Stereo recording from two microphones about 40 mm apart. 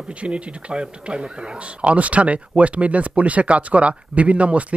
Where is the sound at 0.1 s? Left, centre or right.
Right.